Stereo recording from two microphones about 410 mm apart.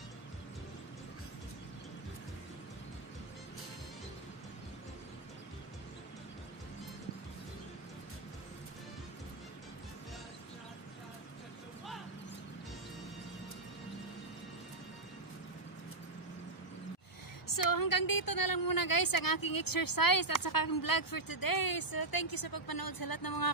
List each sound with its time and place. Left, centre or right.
17.5 s a woman's voice: left